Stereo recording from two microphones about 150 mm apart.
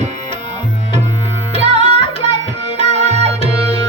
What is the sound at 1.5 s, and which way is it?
Music, 45° right (ahead or behind).